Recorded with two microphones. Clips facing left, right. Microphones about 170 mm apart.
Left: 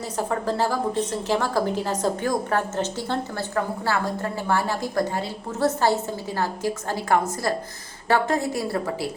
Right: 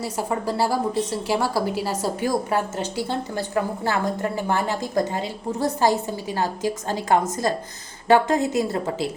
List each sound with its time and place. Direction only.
0.0 s a woman's voice: 10° right (ahead or behind)